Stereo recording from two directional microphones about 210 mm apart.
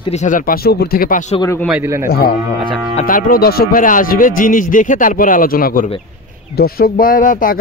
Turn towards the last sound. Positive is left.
turn(degrees=40)  # may be behind; listen again after turning